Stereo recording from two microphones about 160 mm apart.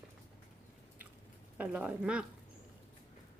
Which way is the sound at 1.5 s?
10° right (ahead or behind).